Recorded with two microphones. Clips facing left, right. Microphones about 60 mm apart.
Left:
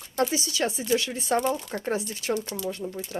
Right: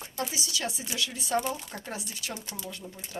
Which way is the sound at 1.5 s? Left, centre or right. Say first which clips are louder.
Left 8 dB; centre.